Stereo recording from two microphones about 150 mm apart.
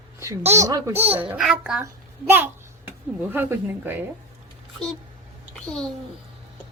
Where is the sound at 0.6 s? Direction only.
20° right (ahead or behind).